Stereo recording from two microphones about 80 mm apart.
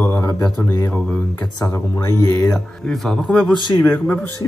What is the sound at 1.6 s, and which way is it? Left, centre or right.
Speech, left.